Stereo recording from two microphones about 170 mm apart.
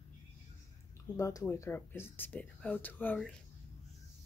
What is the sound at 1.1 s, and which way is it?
Speech, 15° left (ahead or behind).